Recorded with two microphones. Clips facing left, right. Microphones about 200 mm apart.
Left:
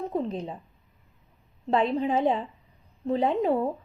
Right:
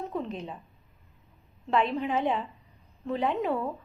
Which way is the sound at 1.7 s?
35° left (ahead or behind).